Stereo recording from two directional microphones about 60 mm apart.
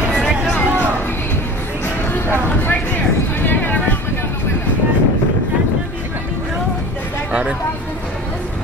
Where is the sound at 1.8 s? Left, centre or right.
Left.